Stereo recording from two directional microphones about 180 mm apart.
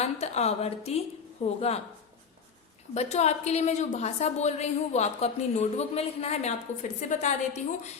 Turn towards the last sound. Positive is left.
turn(degrees=40)  # may be behind; listen again after turning